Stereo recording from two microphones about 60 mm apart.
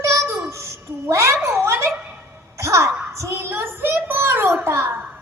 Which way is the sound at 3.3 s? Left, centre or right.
Right.